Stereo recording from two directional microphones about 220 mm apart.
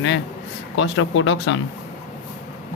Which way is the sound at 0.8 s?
60° left (ahead or behind).